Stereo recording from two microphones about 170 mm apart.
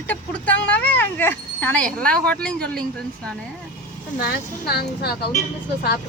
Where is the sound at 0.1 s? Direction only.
10° left (ahead or behind).